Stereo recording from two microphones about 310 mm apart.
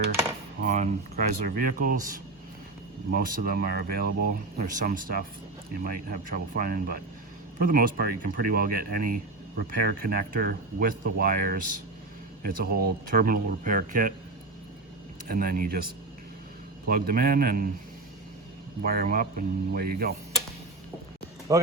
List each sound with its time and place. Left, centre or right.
0.6 s a sound: right
1.5 s speech: right
15.3 s speech: right
18.8 s speech: right
21.5 s speech: centre